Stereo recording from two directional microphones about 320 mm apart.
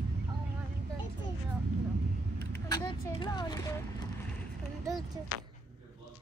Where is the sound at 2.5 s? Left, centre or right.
Centre.